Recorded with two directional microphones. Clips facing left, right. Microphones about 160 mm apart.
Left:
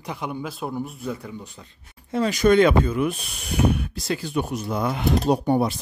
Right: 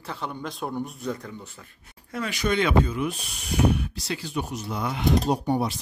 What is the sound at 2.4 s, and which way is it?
Speech, 45° left (ahead or behind).